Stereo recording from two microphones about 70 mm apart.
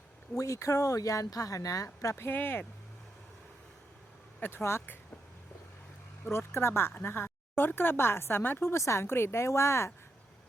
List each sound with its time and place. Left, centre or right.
0.3 s speech: left
2.1 s speech: left
4.4 s speech: left
6.2 s speech: left